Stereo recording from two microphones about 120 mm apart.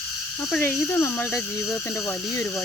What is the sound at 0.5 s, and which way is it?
Speech, 15° left (ahead or behind).